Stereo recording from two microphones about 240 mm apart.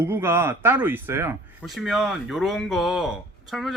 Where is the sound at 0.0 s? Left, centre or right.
Centre.